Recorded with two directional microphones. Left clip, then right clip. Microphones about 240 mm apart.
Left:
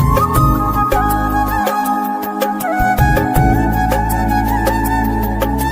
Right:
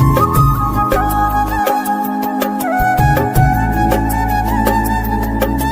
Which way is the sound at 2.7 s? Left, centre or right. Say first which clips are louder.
Right 2 dB; centre.